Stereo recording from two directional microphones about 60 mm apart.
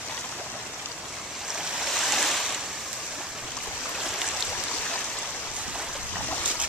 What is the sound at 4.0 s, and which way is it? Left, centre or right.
Stream, centre.